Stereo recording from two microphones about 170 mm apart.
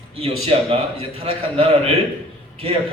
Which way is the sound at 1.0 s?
35° right (ahead or behind).